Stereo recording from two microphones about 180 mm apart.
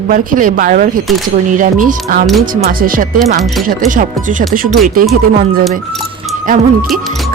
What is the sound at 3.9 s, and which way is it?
Speech, 45° right (ahead or behind).